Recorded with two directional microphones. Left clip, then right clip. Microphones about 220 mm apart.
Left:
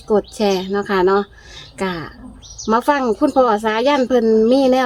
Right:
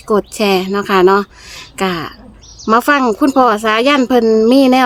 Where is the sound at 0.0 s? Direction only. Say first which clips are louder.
Right 3 dB; 35° right (ahead or behind).